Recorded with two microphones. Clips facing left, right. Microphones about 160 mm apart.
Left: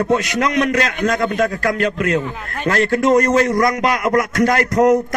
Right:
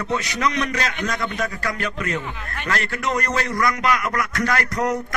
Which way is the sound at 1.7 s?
90° left.